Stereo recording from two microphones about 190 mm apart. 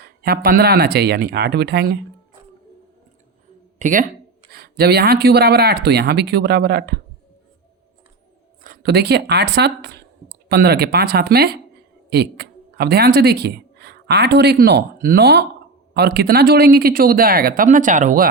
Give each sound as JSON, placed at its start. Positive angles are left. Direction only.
{"t": 0.0, "sound": "speech", "side_deg": -55}
{"t": 3.8, "sound": "speech", "side_deg": -45}
{"t": 4.5, "sound": "speech", "side_deg": -55}
{"t": 8.6, "sound": "speech", "side_deg": -50}